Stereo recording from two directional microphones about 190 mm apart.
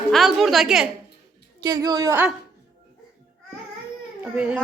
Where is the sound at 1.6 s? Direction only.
20° right (ahead or behind).